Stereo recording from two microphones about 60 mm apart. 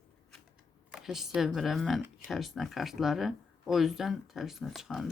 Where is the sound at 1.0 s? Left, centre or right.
Centre.